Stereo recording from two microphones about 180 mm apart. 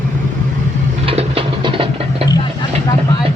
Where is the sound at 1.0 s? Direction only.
30° right (ahead or behind).